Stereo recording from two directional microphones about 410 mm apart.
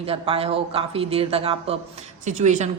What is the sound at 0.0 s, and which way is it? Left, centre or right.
A woman's voice, centre.